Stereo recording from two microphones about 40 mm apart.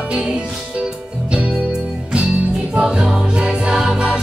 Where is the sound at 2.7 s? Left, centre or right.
Right.